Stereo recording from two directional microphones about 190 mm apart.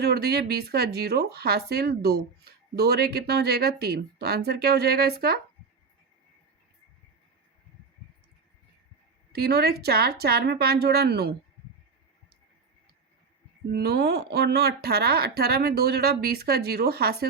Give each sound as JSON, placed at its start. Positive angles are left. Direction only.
{"t": 0.0, "sound": "speech", "side_deg": -55}
{"t": 9.3, "sound": "speech", "side_deg": -55}
{"t": 13.7, "sound": "speech", "side_deg": -55}